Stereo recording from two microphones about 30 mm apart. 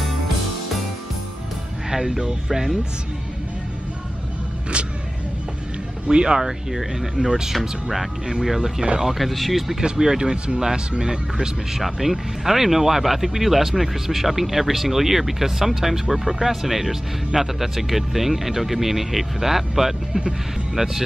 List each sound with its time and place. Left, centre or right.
1.9 s speech: centre
4.7 s vehicle: right
6.0 s speech: right
6.7 s speech: centre
7.2 s speech: right
9.2 s speech: centre
9.8 s speech: right
11.8 s speech: centre